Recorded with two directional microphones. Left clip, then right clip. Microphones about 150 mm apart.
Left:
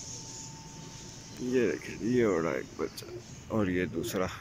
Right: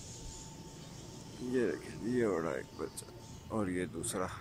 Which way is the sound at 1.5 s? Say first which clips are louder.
Left 5 dB; centre (ahead or behind).